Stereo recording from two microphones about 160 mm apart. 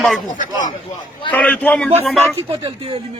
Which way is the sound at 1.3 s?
10° left (ahead or behind).